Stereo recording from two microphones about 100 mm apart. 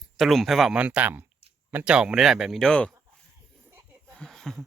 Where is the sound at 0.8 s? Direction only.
15° right (ahead or behind); by 2.9 s 5° left (ahead or behind).